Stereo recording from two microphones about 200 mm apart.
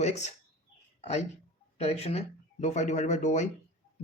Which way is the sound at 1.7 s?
30° left (ahead or behind).